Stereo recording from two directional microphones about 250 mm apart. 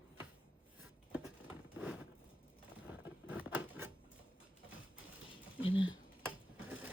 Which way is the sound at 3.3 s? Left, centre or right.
Centre.